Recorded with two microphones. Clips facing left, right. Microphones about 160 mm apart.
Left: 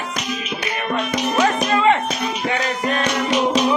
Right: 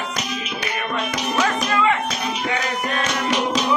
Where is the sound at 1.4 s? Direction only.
30° left (ahead or behind).